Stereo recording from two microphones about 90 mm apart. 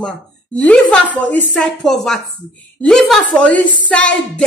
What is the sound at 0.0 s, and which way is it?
A woman's voice, 15° left (ahead or behind).